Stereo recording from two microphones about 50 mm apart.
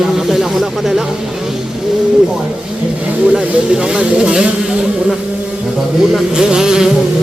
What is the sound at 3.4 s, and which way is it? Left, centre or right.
Speech, right.